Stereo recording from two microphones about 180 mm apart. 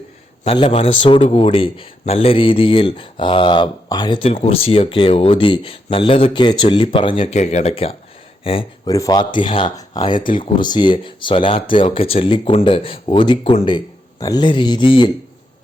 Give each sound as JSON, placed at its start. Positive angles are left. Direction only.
{"t": 0.4, "sound": "a man's voice", "side_deg": 30}
{"t": 8.9, "sound": "speech", "side_deg": 20}